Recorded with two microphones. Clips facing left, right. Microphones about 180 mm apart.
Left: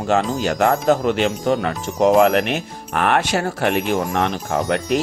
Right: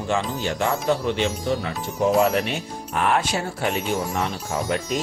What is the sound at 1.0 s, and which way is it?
Speech, 90° left.